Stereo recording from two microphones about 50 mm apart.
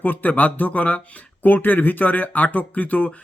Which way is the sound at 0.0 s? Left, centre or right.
Left.